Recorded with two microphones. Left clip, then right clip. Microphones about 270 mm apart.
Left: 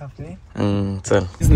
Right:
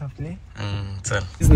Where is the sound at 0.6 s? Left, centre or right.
Left.